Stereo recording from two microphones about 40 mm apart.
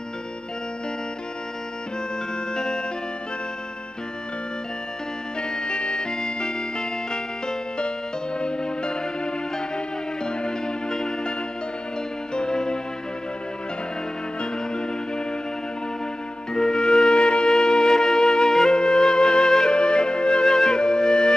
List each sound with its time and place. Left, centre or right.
2.5 s music: centre
5.5 s music: centre
12.4 s music: centre
14.4 s music: left
16.5 s music: centre